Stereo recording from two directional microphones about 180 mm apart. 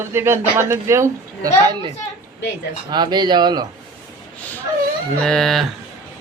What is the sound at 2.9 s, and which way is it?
Speech, 25° right (ahead or behind).